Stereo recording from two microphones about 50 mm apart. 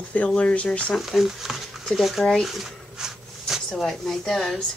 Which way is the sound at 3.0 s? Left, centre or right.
Centre.